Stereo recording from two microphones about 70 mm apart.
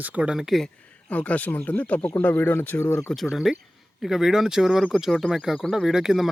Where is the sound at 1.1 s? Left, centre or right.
Left.